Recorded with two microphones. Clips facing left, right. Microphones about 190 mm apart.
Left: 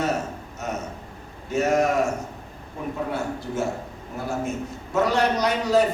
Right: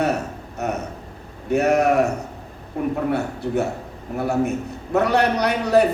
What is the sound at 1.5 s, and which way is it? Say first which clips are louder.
A woman's voice: right 4 dB; 65° right (ahead or behind).